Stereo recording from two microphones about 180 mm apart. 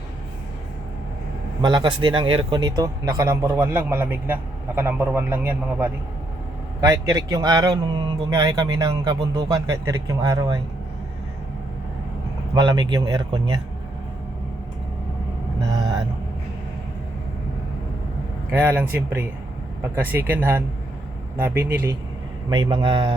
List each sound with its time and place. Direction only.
1.6 s speech: 25° right (ahead or behind)
12.5 s speech: 25° right (ahead or behind)
18.5 s speech: 10° right (ahead or behind)
22.4 s speech: 25° right (ahead or behind)